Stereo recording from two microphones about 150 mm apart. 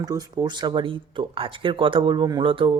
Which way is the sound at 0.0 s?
25° right (ahead or behind).